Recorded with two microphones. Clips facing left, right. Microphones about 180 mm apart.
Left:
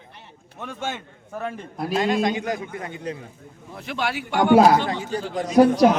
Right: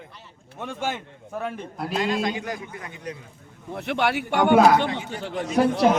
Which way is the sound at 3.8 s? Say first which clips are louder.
Right 3 dB; 60° right (ahead or behind).